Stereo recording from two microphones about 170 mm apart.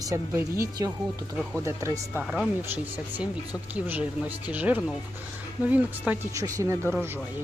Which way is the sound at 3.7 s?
10° right (ahead or behind).